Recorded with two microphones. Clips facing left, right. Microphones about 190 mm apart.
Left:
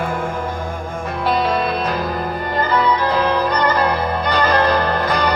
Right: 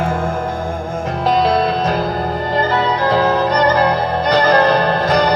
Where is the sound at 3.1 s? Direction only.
40° right (ahead or behind).